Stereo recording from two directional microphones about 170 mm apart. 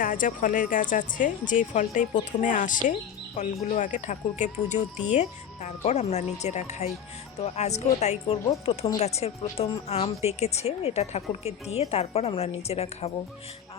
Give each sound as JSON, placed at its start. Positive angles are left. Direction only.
{"t": 0.0, "sound": "speech", "side_deg": 55}